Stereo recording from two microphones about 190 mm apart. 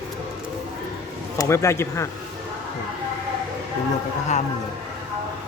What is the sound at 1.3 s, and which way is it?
Speech, 15° left (ahead or behind).